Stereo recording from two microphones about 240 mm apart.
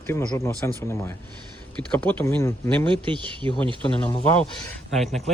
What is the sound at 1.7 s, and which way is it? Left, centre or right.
Speech, centre.